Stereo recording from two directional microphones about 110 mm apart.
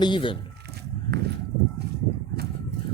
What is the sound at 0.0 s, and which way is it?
Speech, 50° left (ahead or behind).